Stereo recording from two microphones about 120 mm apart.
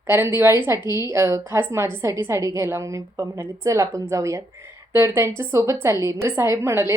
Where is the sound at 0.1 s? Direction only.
20° right (ahead or behind).